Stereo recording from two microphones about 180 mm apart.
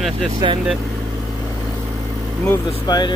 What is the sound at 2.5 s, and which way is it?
Speech, 20° left (ahead or behind).